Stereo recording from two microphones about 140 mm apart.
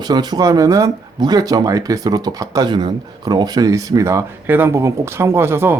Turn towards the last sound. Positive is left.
turn(degrees=-15)  # may be behind; listen again after turning